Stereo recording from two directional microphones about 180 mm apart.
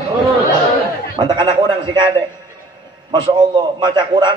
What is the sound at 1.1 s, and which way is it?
Speech, 25° right (ahead or behind).